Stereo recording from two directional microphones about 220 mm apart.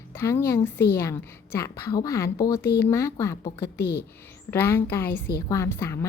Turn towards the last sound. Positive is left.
turn(degrees=10)  # may be behind; listen again after turning